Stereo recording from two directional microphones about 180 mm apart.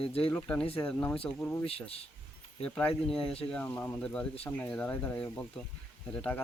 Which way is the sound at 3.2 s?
35° left (ahead or behind).